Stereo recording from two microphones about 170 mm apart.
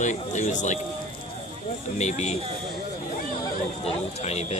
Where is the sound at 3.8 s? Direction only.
40° left (ahead or behind).